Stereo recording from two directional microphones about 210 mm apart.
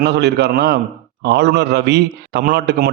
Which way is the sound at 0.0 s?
55° right (ahead or behind).